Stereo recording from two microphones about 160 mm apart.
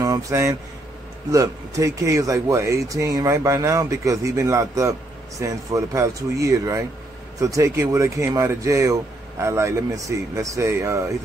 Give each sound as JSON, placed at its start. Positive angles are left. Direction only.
{"t": 0.0, "sound": "speech", "side_deg": -20}